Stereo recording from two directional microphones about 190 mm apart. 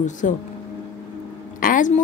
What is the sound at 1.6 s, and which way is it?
Speech, 45° left (ahead or behind).